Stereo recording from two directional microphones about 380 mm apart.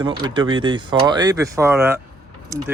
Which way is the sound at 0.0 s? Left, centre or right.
Centre.